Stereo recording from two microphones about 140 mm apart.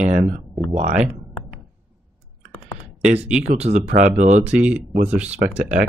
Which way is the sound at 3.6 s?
60° right (ahead or behind).